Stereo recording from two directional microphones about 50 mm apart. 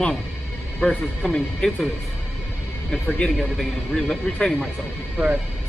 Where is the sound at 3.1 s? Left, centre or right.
Left.